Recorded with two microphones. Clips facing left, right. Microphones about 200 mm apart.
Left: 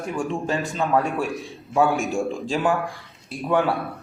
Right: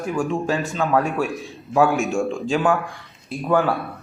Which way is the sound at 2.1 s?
Centre (ahead or behind).